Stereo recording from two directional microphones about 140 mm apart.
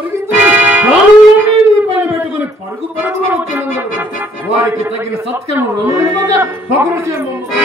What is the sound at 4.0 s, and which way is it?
Music, 15° right (ahead or behind).